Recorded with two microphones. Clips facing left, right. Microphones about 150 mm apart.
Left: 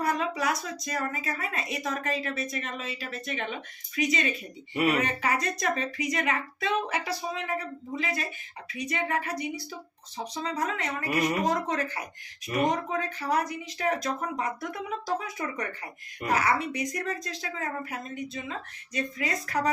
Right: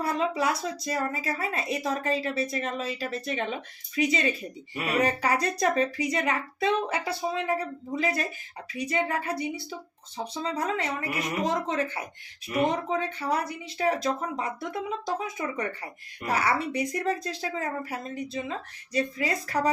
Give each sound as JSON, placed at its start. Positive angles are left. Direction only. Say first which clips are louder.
{"t": 0.0, "sound": "a woman's voice", "louder": "right 2 dB", "side_deg": -30}